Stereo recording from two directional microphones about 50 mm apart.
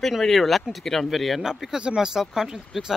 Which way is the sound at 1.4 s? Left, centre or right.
Centre.